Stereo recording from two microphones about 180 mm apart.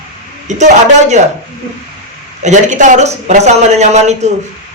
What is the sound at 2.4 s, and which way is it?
A man's voice, 40° right (ahead or behind).